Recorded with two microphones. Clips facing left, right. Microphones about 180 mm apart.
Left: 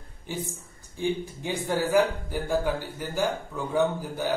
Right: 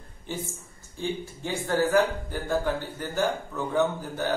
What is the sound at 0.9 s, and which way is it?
A man's voice, 15° left (ahead or behind).